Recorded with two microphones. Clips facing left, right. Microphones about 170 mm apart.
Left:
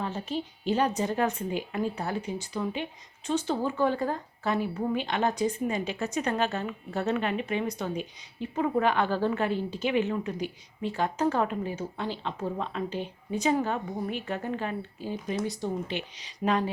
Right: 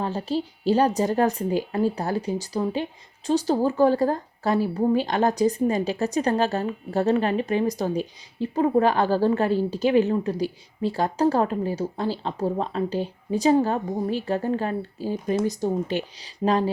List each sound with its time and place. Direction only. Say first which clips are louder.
0.0 s speech: right 6 dB; 35° right (ahead or behind)